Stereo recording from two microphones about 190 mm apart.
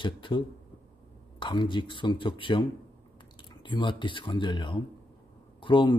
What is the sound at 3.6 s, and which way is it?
Speech, 25° left (ahead or behind).